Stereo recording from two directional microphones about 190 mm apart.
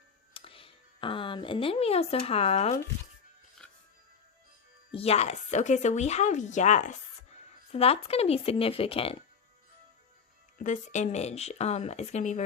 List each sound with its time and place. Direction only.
0.3 s speech: 30° left (ahead or behind)
4.9 s speech: 35° left (ahead or behind)
10.6 s speech: 40° left (ahead or behind)